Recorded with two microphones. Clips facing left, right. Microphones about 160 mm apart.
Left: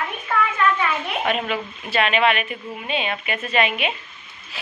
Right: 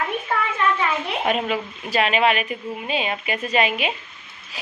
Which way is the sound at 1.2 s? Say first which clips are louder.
Right 2 dB; 35° right (ahead or behind).